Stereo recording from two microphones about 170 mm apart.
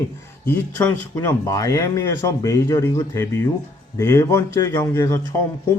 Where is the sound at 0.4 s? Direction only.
15° left (ahead or behind).